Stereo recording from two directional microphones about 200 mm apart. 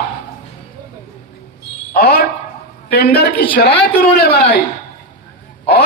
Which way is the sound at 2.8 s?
50° left (ahead or behind).